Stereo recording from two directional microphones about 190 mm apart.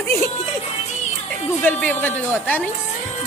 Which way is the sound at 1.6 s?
10° left (ahead or behind).